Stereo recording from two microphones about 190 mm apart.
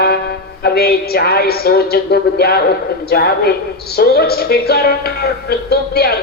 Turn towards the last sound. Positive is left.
turn(degrees=55)  # may be behind; listen again after turning